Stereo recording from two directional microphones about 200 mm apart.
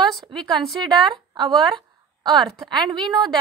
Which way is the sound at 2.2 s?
25° right (ahead or behind).